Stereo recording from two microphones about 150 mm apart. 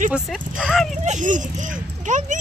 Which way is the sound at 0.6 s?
Centre (ahead or behind).